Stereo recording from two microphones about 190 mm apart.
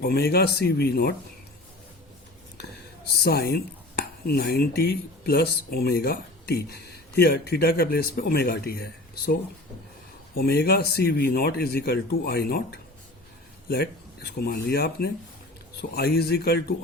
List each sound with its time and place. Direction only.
0.0 s speech: 55° left (ahead or behind)
3.2 s speech: 60° left (ahead or behind)